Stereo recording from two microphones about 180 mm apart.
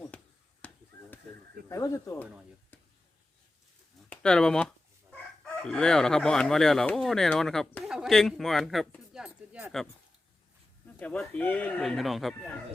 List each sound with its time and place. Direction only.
0.1 s a sound: 5° left (ahead or behind)
0.6 s chop: 10° left (ahead or behind)
1.7 s speech: 15° left (ahead or behind)
4.1 s speech: 5° left (ahead or behind)
10.8 s speech: 5° left (ahead or behind)